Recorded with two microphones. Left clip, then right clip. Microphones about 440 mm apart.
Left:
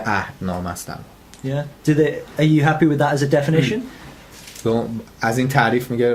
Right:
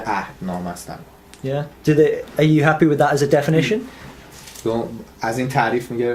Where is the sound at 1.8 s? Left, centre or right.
Centre.